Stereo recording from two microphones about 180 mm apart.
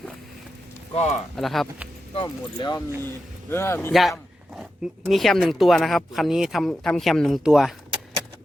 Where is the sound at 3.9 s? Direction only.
Centre (ahead or behind).